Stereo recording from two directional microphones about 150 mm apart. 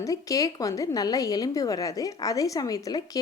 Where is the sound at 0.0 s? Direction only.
20° left (ahead or behind).